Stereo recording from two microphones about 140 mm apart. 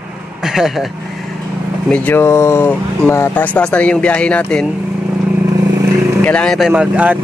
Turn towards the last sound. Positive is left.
turn(degrees=-10)  # may be behind; listen again after turning